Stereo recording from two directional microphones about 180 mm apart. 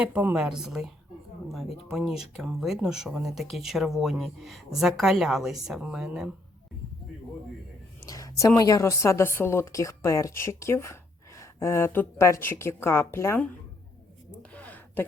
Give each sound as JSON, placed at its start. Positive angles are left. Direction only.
{"t": 0.0, "sound": "speech", "side_deg": -10}
{"t": 1.9, "sound": "speech", "side_deg": 0}
{"t": 8.0, "sound": "a woman's voice", "side_deg": 20}
{"t": 14.5, "sound": "a sound", "side_deg": 10}